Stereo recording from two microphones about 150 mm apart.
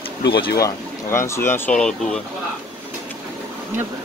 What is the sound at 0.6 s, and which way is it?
Speech, 20° left (ahead or behind).